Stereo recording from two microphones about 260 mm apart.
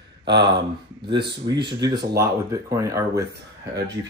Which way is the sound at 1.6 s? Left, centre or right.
Centre.